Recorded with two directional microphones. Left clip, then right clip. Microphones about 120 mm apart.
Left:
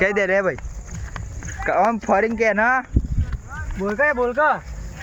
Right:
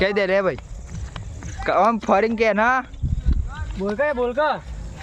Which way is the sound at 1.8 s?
35° right (ahead or behind).